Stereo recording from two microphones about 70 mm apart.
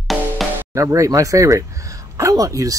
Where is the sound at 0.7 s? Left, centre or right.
Right.